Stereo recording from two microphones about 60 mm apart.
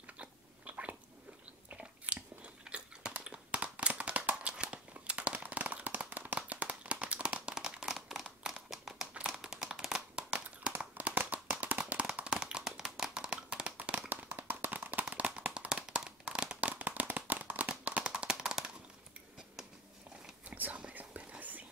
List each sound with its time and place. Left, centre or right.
0.0 s biting: right
3.2 s a sound: centre
3.6 s crumpling: right
6.0 s clapping: right; by 8.5 s centre
8.6 s crumpling: centre
9.4 s a sound: centre
20.4 s whispering: right